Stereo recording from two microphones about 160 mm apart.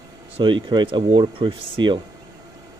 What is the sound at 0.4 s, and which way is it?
Speech, 30° right (ahead or behind).